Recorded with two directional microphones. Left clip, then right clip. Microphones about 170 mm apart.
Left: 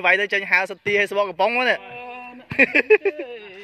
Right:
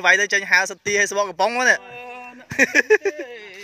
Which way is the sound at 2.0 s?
45° left (ahead or behind).